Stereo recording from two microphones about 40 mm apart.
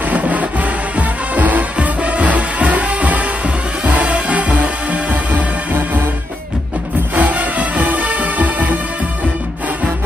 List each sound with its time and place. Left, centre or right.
0.1 s music: right
7.2 s music: right